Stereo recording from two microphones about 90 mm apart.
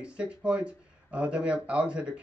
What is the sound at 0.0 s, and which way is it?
Speech, 10° right (ahead or behind).